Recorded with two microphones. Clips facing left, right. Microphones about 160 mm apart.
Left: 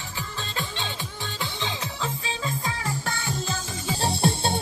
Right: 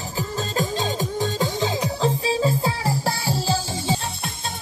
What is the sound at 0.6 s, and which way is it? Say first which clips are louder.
Music: right 9 dB; 40° right (ahead or behind).